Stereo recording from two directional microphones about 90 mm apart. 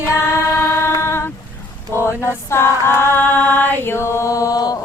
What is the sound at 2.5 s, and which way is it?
Female singing, 30° left (ahead or behind).